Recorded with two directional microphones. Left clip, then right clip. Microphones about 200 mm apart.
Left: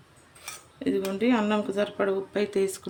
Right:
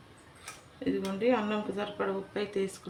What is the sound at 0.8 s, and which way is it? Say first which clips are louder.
Speech: left 3 dB; 50° left (ahead or behind).